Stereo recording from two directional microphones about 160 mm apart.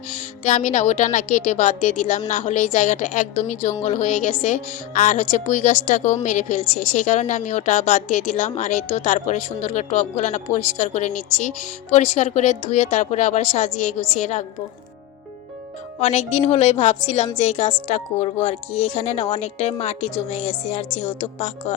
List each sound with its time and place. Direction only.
0.4 s a woman's voice: 45° left (ahead or behind)
16.0 s a woman's voice: 45° left (ahead or behind)